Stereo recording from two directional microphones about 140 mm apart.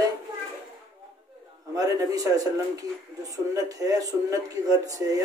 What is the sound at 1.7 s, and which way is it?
Speech, 25° right (ahead or behind).